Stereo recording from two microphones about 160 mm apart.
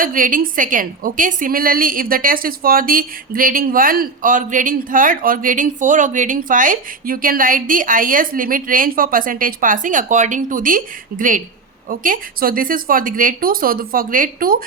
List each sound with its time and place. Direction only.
0.0 s a woman's voice: 60° right (ahead or behind)